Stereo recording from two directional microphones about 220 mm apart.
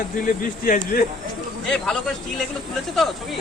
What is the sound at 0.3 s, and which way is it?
Speech, 40° left (ahead or behind).